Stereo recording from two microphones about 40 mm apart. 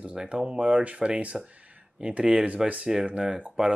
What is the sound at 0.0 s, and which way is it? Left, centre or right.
Speech, right.